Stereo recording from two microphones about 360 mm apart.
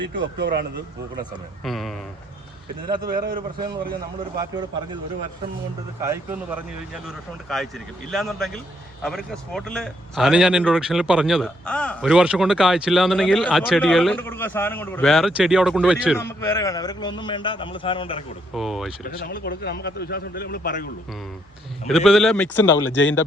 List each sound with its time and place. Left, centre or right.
0.0 s speech: right
1.6 s speech: centre
2.8 s speech: centre
6.0 s speech: centre
16.4 s a man's voice: centre
18.5 s speech: centre
19.2 s a man's voice: left
21.8 s speech: centre
22.6 s speech: left